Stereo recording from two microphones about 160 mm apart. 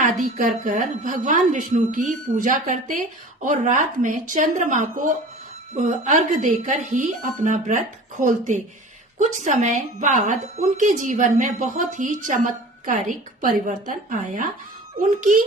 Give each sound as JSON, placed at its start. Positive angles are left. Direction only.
{"t": 0.0, "sound": "a woman's voice", "side_deg": -55}